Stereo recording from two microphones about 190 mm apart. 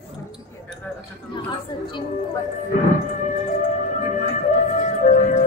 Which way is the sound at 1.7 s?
25° left (ahead or behind).